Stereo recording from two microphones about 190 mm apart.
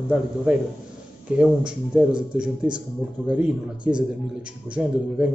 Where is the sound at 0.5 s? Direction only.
5° right (ahead or behind).